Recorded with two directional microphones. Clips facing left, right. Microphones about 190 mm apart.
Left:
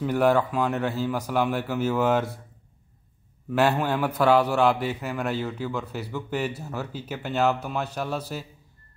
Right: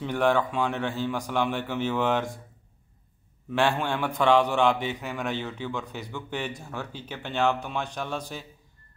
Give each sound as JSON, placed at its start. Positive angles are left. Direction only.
{"t": 0.0, "sound": "speech", "side_deg": 5}
{"t": 3.4, "sound": "speech", "side_deg": 5}